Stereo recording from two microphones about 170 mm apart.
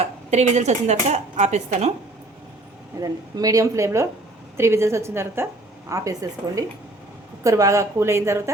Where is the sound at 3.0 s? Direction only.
20° right (ahead or behind).